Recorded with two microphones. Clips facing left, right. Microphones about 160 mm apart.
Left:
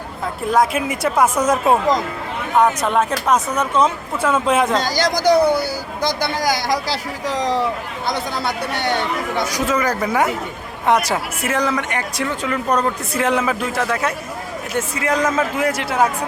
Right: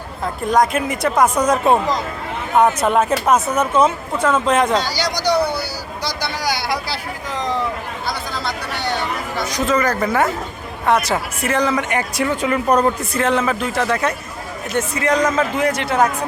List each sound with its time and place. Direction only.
0.5 s speech: 5° left (ahead or behind)
4.2 s speech: 10° left (ahead or behind)
4.8 s speech: 50° left (ahead or behind)
9.5 s speech: 10° left (ahead or behind)
11.8 s speech: 5° right (ahead or behind)
13.1 s speech: 10° left (ahead or behind)